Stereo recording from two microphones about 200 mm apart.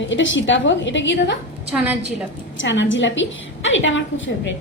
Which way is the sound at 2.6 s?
65° left (ahead or behind).